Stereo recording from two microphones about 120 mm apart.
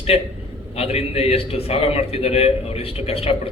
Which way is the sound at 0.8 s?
55° left (ahead or behind).